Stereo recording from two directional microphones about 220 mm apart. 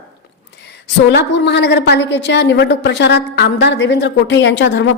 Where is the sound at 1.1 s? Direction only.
50° left (ahead or behind).